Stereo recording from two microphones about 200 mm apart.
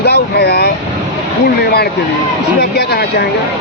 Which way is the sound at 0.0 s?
55° left (ahead or behind).